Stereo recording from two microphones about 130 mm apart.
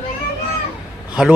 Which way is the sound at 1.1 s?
10° right (ahead or behind).